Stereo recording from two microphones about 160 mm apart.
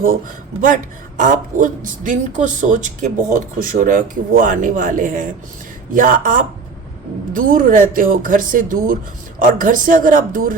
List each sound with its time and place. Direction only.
0.6 s speech: 55° right (ahead or behind)